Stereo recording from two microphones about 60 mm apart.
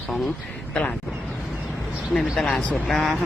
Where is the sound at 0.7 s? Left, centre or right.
Centre.